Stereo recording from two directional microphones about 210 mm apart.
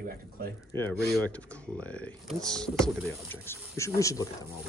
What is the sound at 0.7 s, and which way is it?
Speech, 10° left (ahead or behind).